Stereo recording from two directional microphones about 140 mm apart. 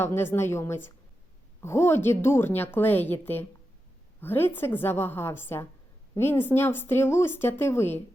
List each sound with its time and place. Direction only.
0.0 s a woman's voice: 15° left (ahead or behind)